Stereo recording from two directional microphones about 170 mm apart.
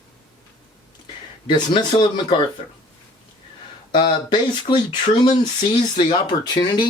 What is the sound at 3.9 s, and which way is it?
Speech, 25° left (ahead or behind).